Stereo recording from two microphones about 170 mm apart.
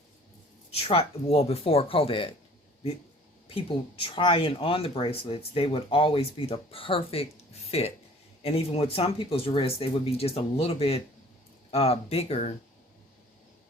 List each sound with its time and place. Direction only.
0.7 s speech: 35° left (ahead or behind)
3.5 s speech: 35° left (ahead or behind)